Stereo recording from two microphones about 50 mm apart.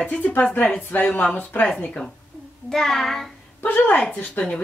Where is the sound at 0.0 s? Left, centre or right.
Left.